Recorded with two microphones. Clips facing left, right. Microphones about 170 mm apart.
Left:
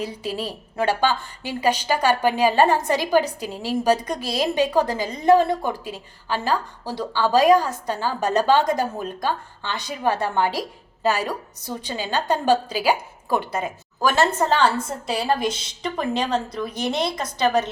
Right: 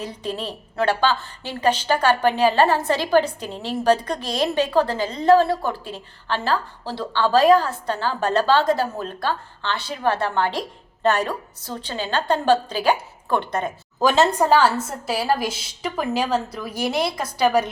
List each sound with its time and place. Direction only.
0.0 s a woman's voice: 10° left (ahead or behind)
14.0 s a woman's voice: 20° right (ahead or behind)